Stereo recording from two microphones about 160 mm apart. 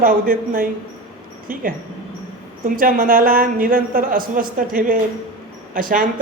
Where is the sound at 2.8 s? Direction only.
60° right (ahead or behind).